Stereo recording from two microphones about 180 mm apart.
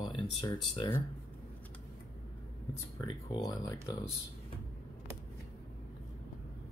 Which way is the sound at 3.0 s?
20° left (ahead or behind).